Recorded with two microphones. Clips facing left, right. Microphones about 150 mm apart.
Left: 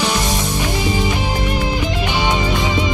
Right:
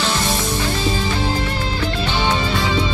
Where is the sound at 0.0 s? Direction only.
15° left (ahead or behind).